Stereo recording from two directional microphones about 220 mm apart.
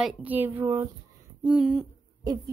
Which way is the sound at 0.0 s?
5° right (ahead or behind).